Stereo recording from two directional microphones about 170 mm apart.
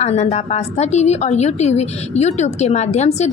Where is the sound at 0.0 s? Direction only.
40° left (ahead or behind).